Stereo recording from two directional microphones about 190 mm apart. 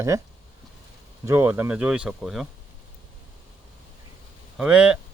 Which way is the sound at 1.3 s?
10° right (ahead or behind).